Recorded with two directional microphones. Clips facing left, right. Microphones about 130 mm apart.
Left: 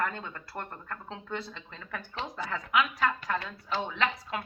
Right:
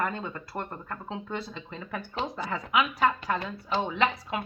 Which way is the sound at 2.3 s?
20° right (ahead or behind).